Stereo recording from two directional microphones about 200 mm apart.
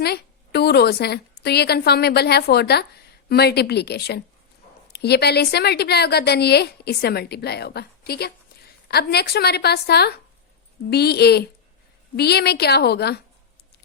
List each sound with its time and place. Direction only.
0.0 s a woman's voice: 55° left (ahead or behind)